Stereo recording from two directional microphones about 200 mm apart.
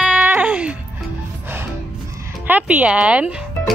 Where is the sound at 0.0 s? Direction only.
5° right (ahead or behind).